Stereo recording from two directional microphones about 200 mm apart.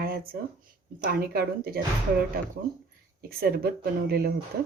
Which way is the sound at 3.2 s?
50° right (ahead or behind).